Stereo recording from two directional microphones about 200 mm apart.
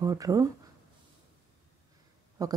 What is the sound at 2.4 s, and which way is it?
Speech, 15° right (ahead or behind).